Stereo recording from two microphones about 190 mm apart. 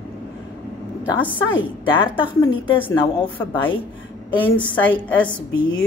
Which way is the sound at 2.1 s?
25° left (ahead or behind).